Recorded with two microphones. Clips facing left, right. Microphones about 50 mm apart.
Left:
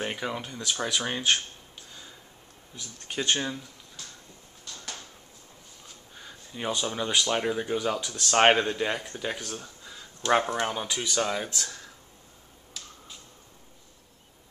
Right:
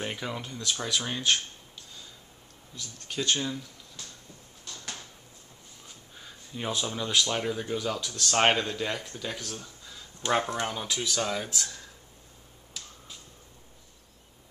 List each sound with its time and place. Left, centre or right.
0.0 s speech: centre
2.7 s speech: centre
6.1 s a sound: centre
6.9 s speech: centre
9.4 s a sound: centre
10.3 s speech: centre